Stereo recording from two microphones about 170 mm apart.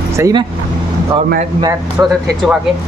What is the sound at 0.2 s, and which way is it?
Speech, 25° right (ahead or behind).